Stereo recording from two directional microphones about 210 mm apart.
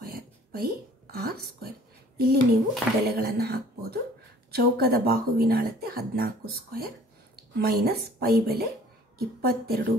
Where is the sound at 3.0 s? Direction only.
50° right (ahead or behind).